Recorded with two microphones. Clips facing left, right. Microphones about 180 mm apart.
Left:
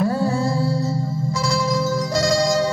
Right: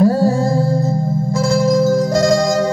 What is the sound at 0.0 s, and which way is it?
Music, 40° right (ahead or behind).